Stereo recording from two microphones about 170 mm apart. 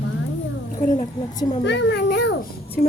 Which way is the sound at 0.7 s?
50° left (ahead or behind).